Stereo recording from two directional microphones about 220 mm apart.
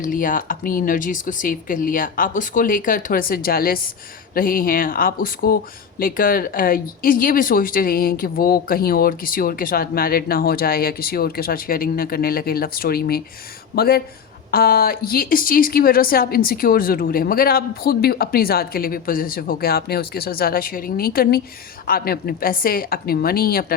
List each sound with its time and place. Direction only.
0.0 s a woman's voice: 40° left (ahead or behind)